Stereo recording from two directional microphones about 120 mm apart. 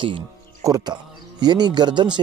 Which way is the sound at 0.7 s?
30° right (ahead or behind).